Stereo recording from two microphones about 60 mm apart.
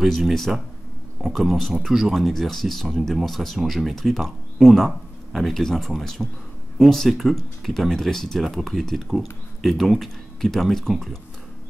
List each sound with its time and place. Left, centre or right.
0.0 s speech: centre